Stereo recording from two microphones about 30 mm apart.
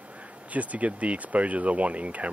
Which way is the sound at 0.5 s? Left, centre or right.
Right.